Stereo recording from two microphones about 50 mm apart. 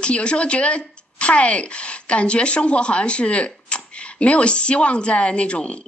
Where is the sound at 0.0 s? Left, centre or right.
Left.